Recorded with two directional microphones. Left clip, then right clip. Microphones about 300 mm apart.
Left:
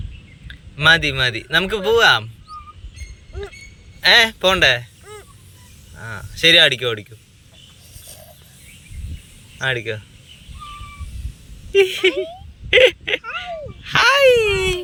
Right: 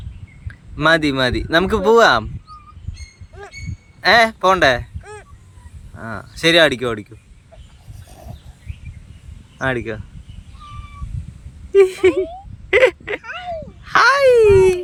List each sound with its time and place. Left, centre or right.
0.4 s a man's voice: centre
4.0 s speech: centre
5.9 s speech: centre
9.6 s speech: centre
11.7 s speech: centre
12.7 s whimper: centre
13.8 s speech: centre